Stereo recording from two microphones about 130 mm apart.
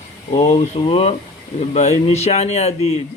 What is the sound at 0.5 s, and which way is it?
Speech, 45° left (ahead or behind).